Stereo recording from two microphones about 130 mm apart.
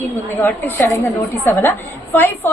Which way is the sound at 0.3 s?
15° left (ahead or behind).